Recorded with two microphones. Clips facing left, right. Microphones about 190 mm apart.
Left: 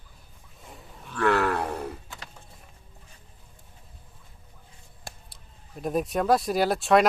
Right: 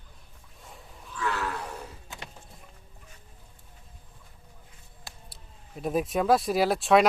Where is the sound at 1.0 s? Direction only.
65° left (ahead or behind).